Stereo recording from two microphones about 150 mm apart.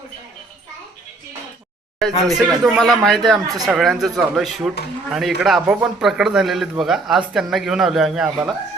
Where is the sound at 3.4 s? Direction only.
25° right (ahead or behind).